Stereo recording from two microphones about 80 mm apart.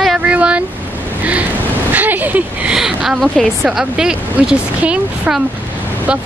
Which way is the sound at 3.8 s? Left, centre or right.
Centre.